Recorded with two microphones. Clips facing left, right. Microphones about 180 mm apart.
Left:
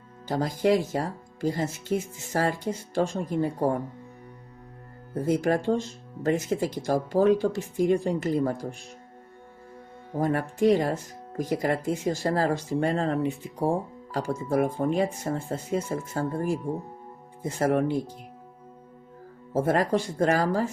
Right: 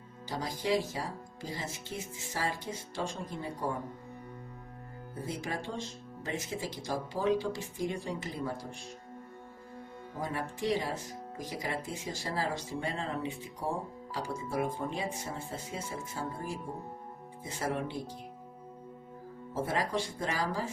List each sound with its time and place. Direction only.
0.3 s speech: 55° left (ahead or behind)
5.1 s speech: 50° left (ahead or behind)
10.2 s speech: 55° left (ahead or behind)
19.5 s speech: 50° left (ahead or behind)